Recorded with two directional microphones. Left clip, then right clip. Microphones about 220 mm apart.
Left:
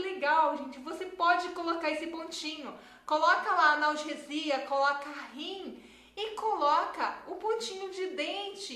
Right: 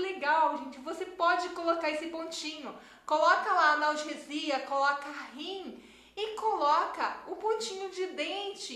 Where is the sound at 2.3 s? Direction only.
5° right (ahead or behind).